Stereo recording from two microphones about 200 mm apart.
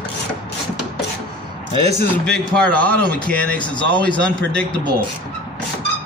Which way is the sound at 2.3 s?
5° left (ahead or behind).